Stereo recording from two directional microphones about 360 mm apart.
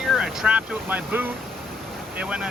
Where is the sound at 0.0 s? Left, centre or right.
Centre.